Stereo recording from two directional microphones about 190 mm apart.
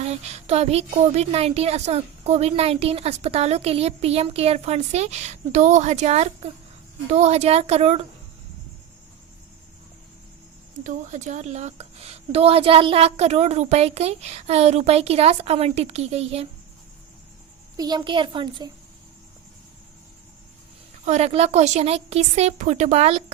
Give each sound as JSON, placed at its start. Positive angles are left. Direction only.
{"t": 0.0, "sound": "a woman's voice", "side_deg": -35}
{"t": 10.8, "sound": "a woman's voice", "side_deg": -40}
{"t": 17.7, "sound": "a child's voice", "side_deg": -20}
{"t": 21.0, "sound": "a woman's voice", "side_deg": -35}